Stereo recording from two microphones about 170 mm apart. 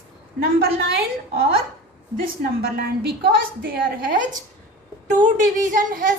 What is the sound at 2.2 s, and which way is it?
A woman's voice, 65° right (ahead or behind).